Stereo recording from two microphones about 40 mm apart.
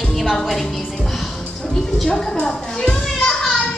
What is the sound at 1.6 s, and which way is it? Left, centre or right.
A woman's voice, centre.